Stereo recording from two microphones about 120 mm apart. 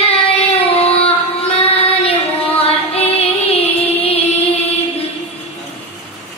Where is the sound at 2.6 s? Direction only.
55° left (ahead or behind).